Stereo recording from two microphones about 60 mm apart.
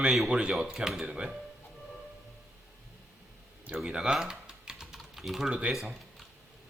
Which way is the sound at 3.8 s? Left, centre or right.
Centre.